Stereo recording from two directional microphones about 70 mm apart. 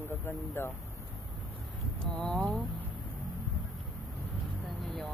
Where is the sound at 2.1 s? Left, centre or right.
Centre.